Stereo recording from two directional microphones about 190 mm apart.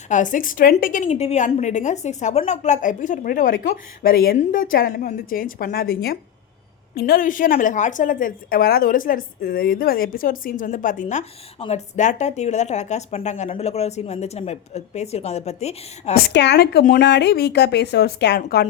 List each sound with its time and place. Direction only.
0.1 s a woman's voice: 45° left (ahead or behind)
16.1 s speech: 60° left (ahead or behind)